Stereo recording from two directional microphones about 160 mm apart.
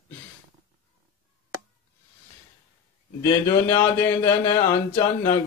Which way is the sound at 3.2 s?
15° left (ahead or behind).